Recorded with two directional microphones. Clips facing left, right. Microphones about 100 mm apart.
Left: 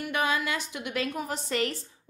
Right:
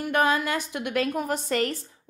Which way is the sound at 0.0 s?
45° right (ahead or behind).